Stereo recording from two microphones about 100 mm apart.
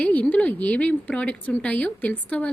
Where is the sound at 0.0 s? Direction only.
15° left (ahead or behind).